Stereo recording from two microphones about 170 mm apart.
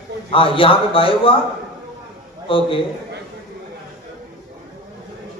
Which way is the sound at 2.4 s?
30° left (ahead or behind).